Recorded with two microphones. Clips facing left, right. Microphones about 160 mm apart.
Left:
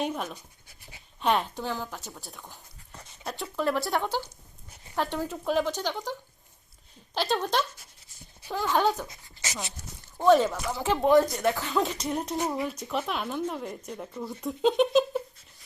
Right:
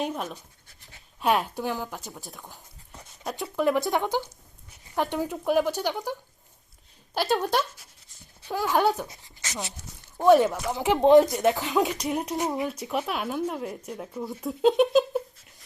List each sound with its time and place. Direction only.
0.0 s speech: centre (ahead or behind)
0.3 s speech: 10° left (ahead or behind)
1.2 s speech: 5° right (ahead or behind)
2.1 s speech: centre (ahead or behind)
2.4 s dog: 10° right (ahead or behind)
3.5 s speech: 15° right (ahead or behind)
8.4 s speech: 15° right (ahead or behind)
9.8 s speech: 40° left (ahead or behind)
10.2 s speech: 15° right (ahead or behind)
12.0 s speech: 5° right (ahead or behind)